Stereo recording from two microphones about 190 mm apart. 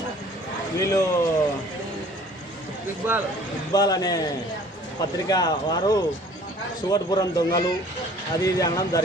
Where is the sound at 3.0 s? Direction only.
10° right (ahead or behind).